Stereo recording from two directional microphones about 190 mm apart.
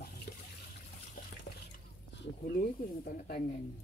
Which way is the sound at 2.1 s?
65° left (ahead or behind).